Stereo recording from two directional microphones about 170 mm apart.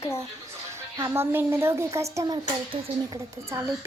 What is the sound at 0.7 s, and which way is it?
A woman's voice, 15° right (ahead or behind).